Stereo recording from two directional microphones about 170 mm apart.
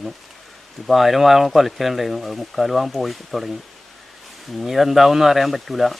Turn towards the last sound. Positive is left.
turn(degrees=0)  # may be behind; listen again after turning